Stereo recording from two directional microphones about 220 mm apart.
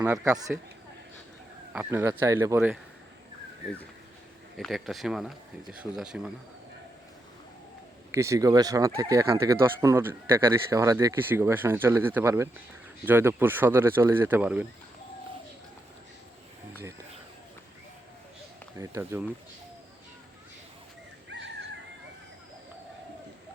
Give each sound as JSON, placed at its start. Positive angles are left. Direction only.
{"t": 0.0, "sound": "speech", "side_deg": -10}
{"t": 1.7, "sound": "speech", "side_deg": -10}
{"t": 4.5, "sound": "speech", "side_deg": 0}
{"t": 8.1, "sound": "speech", "side_deg": -15}
{"t": 18.8, "sound": "speech", "side_deg": -10}
{"t": 21.2, "sound": "dog", "side_deg": -55}